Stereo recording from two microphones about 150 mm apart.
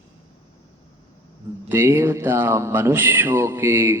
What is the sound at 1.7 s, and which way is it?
Speech, 15° right (ahead or behind).